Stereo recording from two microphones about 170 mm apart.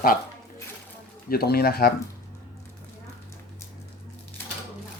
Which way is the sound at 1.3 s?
65° left (ahead or behind).